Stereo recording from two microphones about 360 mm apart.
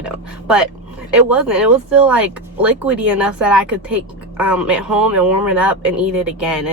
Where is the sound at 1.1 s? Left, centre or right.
Centre.